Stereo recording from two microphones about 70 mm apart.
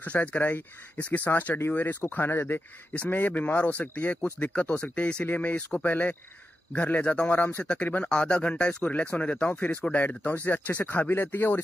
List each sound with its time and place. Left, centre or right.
0.0 s speech: left
7.3 s speech: left
7.6 s speech: centre; by 11.6 s left